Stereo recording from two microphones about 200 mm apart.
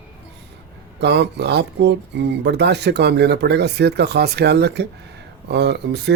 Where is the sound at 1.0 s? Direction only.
55° right (ahead or behind).